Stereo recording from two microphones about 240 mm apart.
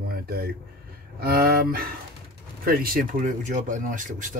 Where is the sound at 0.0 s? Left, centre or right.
Right.